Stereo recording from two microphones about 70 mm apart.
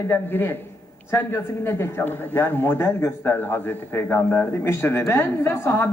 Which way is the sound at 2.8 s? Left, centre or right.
Left.